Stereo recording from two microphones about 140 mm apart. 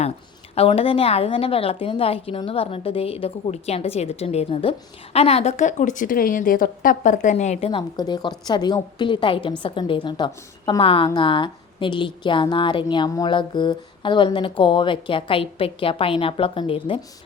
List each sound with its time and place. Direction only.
0.5 s a woman's voice: 45° left (ahead or behind)
7.7 s a woman's voice: 30° left (ahead or behind)